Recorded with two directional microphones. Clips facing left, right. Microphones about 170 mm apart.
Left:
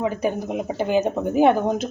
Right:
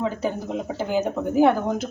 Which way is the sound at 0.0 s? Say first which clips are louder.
Left 2 dB; 15° left (ahead or behind).